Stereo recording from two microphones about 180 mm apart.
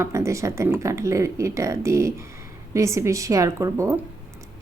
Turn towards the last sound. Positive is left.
turn(degrees=-15)  # may be behind; listen again after turning